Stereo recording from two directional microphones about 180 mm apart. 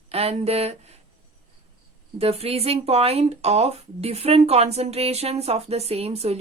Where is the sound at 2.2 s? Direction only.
35° right (ahead or behind).